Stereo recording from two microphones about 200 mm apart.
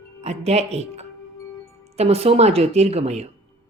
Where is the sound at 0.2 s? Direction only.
30° right (ahead or behind).